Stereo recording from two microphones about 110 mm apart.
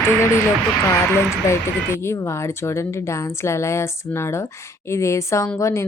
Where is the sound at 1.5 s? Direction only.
25° left (ahead or behind).